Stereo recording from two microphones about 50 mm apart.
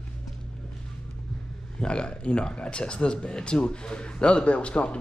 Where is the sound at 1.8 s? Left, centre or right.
Centre.